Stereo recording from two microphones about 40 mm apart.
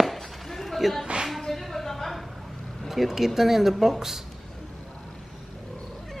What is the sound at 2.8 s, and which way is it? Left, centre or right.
Speech, centre.